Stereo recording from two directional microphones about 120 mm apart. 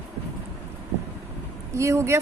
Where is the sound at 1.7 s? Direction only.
25° right (ahead or behind).